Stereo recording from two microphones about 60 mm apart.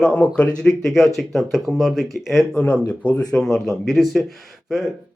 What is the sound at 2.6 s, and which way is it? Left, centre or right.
Speech, left.